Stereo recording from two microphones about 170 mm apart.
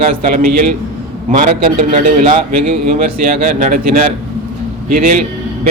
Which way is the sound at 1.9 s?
40° right (ahead or behind).